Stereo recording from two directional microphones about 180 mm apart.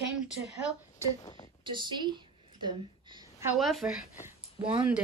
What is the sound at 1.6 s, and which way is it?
Speech, 25° right (ahead or behind).